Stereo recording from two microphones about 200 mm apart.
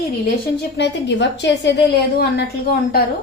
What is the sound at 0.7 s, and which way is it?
A woman's voice, 60° left (ahead or behind).